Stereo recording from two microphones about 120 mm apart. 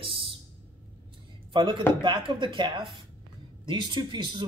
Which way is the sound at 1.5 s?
40° right (ahead or behind).